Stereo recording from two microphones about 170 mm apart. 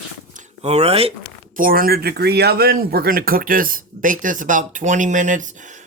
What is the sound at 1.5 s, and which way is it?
Speech, 55° right (ahead or behind).